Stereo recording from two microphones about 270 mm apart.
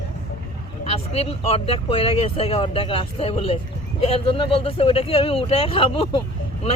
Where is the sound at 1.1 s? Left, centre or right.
Left.